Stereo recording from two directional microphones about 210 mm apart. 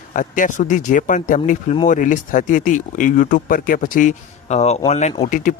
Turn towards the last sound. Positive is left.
turn(degrees=35)  # may be behind; listen again after turning